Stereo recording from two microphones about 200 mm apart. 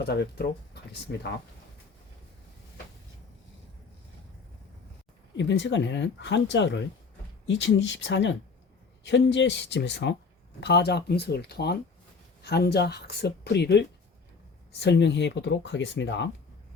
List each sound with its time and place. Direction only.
0.0 s speech: 55° left (ahead or behind)
5.4 s speech: 60° left (ahead or behind)